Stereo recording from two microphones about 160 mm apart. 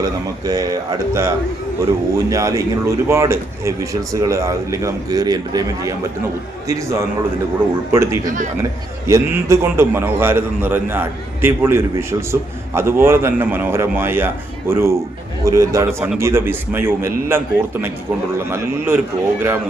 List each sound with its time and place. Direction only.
0.0 s a man's voice: 25° right (ahead or behind)